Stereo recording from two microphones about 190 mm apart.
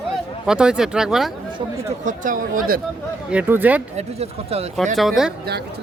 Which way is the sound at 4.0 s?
35° right (ahead or behind).